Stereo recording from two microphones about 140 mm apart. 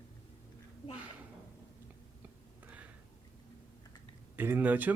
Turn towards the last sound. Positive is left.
turn(degrees=-10)  # may be behind; listen again after turning